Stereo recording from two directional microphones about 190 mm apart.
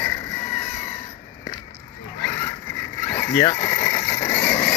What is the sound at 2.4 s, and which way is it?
Mechanisms, 10° left (ahead or behind).